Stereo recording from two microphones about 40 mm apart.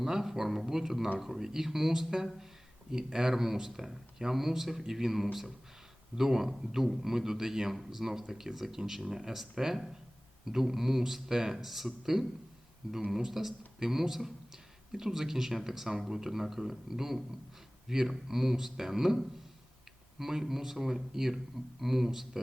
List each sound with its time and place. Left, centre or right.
0.0 s a man's voice: centre